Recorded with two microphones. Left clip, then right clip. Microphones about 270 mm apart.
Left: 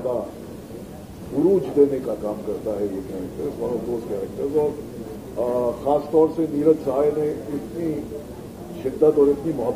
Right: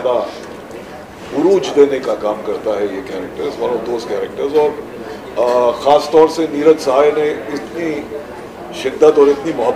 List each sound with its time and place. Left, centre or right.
0.0 s a man's voice: right
1.3 s a man's voice: centre
2.0 s a man's voice: right
8.8 s a man's voice: centre